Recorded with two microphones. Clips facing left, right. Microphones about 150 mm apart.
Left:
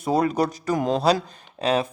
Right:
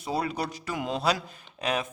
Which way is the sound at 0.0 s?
45° left (ahead or behind).